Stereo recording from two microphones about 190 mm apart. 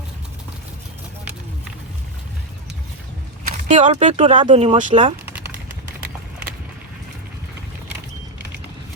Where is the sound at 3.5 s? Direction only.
35° right (ahead or behind).